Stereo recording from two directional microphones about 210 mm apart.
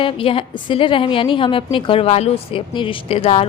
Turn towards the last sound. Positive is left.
turn(degrees=30)  # may be behind; listen again after turning